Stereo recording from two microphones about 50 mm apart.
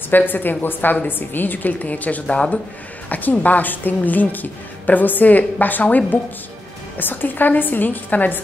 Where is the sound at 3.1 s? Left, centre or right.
Left.